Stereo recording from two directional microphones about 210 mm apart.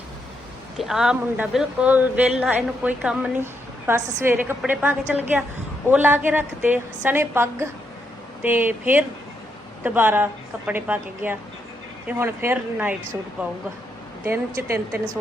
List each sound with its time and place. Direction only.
0.8 s speech: centre (ahead or behind)
14.3 s speech: 10° right (ahead or behind)